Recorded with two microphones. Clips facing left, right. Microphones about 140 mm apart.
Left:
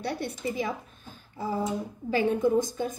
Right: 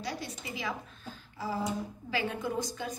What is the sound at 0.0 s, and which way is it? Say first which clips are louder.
Speech: left 7 dB; 60° left (ahead or behind).